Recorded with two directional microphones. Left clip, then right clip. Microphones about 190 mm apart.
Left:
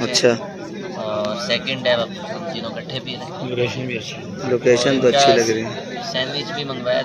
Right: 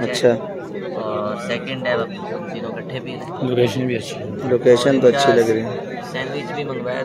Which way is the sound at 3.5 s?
60° right (ahead or behind).